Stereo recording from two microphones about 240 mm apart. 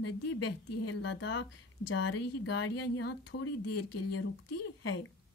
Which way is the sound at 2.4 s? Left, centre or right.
Left.